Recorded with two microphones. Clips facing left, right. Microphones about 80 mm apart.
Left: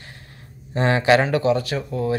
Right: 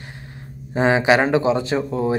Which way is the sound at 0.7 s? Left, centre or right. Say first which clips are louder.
Right 1 dB; centre.